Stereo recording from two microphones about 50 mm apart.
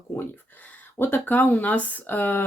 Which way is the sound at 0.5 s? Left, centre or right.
Left.